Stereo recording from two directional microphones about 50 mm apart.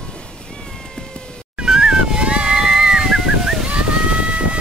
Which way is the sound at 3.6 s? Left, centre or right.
Right.